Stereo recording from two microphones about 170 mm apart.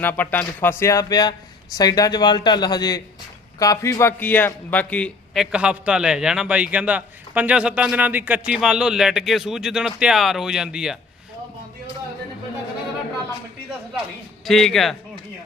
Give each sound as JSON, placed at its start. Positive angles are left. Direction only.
{"t": 0.0, "sound": "a man's voice", "side_deg": 10}
{"t": 14.4, "sound": "a man's voice", "side_deg": 0}